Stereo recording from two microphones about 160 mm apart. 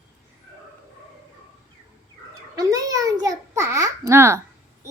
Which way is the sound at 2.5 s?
20° right (ahead or behind).